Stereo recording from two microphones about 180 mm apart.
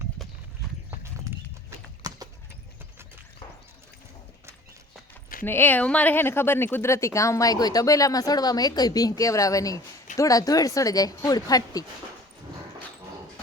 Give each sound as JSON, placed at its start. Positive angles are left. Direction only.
{"t": 1.3, "sound": "clip-clop", "side_deg": -15}
{"t": 5.5, "sound": "a woman's voice", "side_deg": 10}